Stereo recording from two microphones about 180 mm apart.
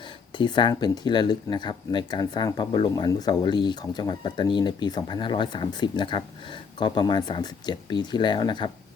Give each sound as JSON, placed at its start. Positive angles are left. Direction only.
{"t": 0.3, "sound": "speech", "side_deg": 25}